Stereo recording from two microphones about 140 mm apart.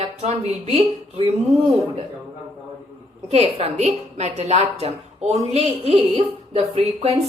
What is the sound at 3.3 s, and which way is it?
A woman's voice, 45° right (ahead or behind).